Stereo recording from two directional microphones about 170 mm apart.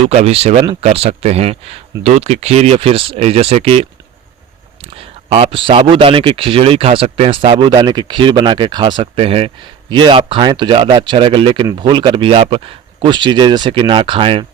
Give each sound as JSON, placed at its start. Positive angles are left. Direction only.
{"t": 0.0, "sound": "speech", "side_deg": -40}